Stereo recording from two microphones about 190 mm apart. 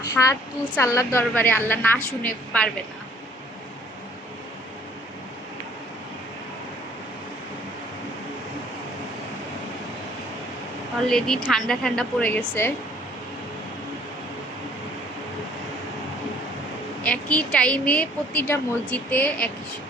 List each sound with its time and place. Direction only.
0.1 s a woman's voice: 15° left (ahead or behind)
11.1 s speech: 5° left (ahead or behind)
17.0 s a woman's voice: 5° left (ahead or behind)